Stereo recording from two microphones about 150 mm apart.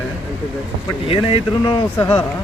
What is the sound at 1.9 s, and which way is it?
Speech, 20° left (ahead or behind).